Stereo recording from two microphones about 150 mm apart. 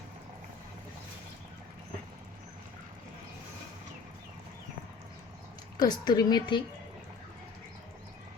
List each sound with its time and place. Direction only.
5.8 s a woman's voice: 25° left (ahead or behind)